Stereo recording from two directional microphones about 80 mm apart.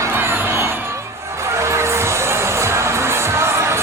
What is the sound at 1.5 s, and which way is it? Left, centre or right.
Music, right.